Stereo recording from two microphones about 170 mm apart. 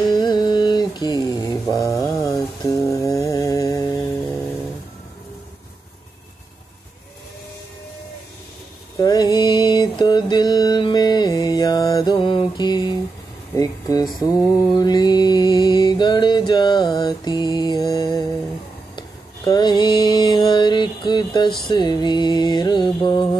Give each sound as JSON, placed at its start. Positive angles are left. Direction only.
{"t": 0.1, "sound": "mantra", "side_deg": 25}
{"t": 9.0, "sound": "mantra", "side_deg": 25}
{"t": 13.6, "sound": "a sound", "side_deg": 20}
{"t": 14.2, "sound": "mantra", "side_deg": 25}
{"t": 21.6, "sound": "music", "side_deg": 25}